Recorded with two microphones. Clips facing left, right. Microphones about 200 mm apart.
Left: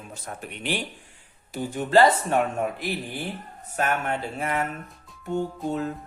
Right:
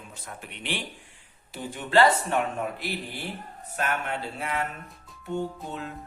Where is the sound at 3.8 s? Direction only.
50° left (ahead or behind).